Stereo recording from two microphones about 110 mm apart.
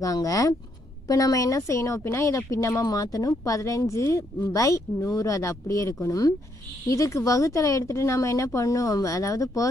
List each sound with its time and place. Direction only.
0.0 s speech: 30° left (ahead or behind)